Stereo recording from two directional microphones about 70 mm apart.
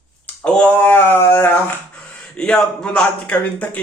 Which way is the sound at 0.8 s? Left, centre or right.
Left.